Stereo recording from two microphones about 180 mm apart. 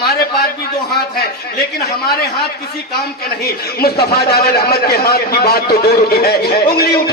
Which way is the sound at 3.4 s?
60° left (ahead or behind).